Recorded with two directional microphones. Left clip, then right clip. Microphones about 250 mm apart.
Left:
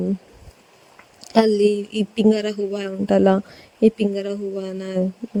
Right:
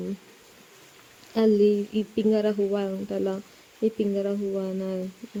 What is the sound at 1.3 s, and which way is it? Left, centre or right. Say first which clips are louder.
Speech: left 5 dB; left.